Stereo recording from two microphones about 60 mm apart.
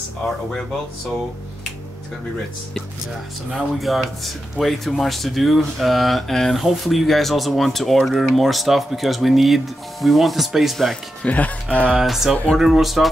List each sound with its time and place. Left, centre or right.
3.5 s speech: centre
11.2 s speech: left
12.0 s speech: centre